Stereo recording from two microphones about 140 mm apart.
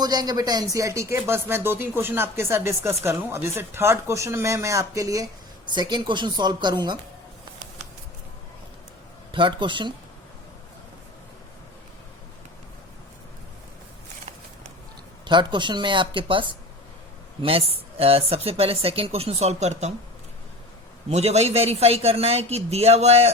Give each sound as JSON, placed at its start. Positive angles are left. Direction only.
{"t": 0.0, "sound": "speech", "side_deg": -30}
{"t": 9.3, "sound": "speech", "side_deg": -35}
{"t": 15.3, "sound": "speech", "side_deg": -35}
{"t": 21.1, "sound": "speech", "side_deg": -50}